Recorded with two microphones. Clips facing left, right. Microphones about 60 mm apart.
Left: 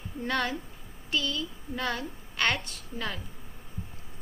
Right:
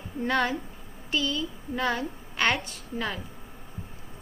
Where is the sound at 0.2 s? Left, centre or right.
Centre.